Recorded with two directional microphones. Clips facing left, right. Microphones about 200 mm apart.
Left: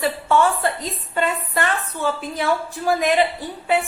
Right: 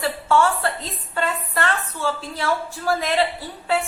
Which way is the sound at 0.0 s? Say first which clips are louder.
Left 1 dB; 20° left (ahead or behind).